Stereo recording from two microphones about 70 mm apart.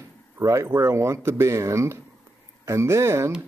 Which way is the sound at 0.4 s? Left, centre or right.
Right.